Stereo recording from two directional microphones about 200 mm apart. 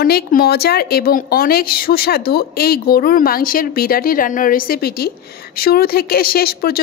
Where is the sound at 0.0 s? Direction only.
50° left (ahead or behind).